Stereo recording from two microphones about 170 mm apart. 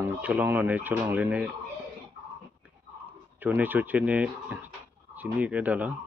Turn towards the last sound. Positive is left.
turn(degrees=-10)  # may be behind; listen again after turning